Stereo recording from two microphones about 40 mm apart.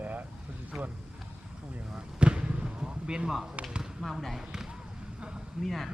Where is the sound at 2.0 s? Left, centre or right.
Right.